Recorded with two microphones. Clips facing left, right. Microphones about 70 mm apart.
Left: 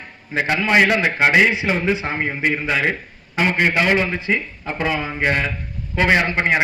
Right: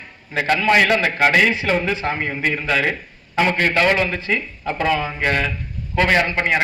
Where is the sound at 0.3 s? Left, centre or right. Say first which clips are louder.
Even; centre.